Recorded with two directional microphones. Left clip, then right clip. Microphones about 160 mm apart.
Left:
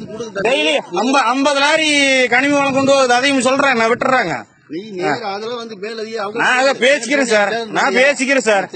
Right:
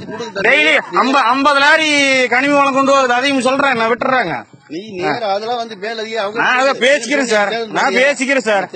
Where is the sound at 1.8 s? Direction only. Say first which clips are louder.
Right 1 dB; 50° left (ahead or behind).